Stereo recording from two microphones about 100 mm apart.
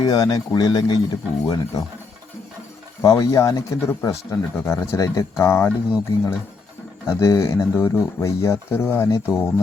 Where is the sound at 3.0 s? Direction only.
35° left (ahead or behind).